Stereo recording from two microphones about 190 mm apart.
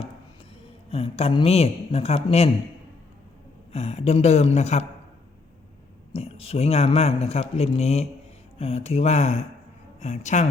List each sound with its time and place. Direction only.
0.9 s speech: 30° left (ahead or behind)
3.7 s speech: 35° left (ahead or behind)
6.1 s speech: 30° left (ahead or behind)